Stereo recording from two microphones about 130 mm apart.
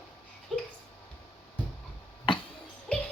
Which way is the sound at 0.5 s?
Centre (ahead or behind).